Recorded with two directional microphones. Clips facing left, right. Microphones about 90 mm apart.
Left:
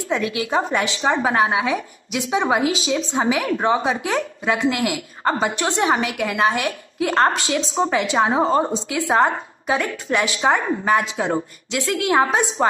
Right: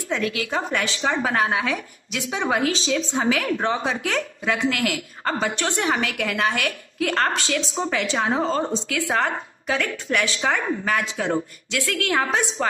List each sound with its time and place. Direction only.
0.1 s a woman's voice: 20° left (ahead or behind)